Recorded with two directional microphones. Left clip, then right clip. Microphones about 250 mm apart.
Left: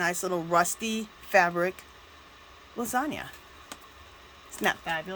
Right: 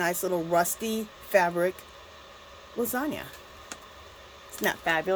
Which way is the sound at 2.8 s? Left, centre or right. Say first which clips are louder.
Even; centre.